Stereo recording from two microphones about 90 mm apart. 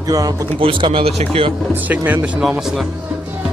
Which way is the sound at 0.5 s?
75° right (ahead or behind).